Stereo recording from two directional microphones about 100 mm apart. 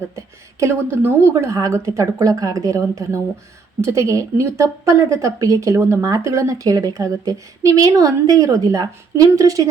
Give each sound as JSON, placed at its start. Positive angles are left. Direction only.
{"t": 0.2, "sound": "a woman's voice", "side_deg": -30}